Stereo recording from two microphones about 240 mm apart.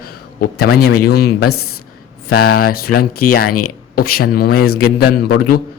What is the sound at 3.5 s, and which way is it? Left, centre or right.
Speech, left.